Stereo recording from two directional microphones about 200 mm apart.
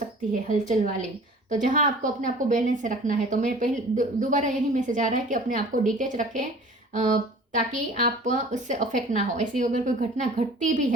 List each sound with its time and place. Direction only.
0.7 s a woman's voice: 40° right (ahead or behind)